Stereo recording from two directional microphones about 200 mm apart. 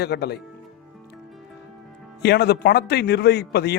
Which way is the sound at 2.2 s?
55° left (ahead or behind).